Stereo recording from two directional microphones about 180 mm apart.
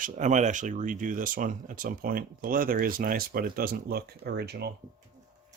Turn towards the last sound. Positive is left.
turn(degrees=-65)  # may be behind; listen again after turning